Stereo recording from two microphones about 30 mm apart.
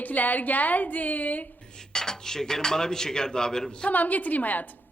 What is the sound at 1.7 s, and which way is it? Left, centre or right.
A woman's voice, left.